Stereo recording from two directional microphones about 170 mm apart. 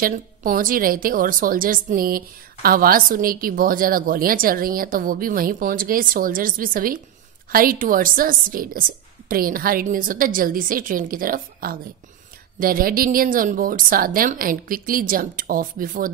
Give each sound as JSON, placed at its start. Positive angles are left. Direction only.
{"t": 0.0, "sound": "a woman's voice", "side_deg": -55}